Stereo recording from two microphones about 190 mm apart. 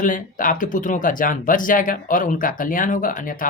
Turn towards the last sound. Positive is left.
turn(degrees=45)  # may be behind; listen again after turning